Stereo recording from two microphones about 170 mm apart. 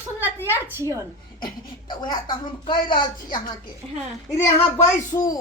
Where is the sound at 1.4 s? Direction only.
25° left (ahead or behind).